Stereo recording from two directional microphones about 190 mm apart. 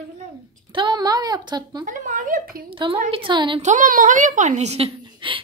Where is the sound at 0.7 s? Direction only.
25° right (ahead or behind).